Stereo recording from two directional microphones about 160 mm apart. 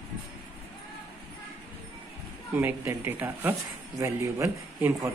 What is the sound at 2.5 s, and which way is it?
Speech, 15° right (ahead or behind).